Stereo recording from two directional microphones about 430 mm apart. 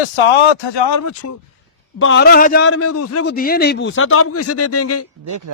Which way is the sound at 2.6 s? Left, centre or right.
Left.